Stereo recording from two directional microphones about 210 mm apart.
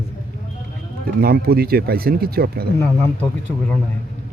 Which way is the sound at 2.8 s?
10° left (ahead or behind).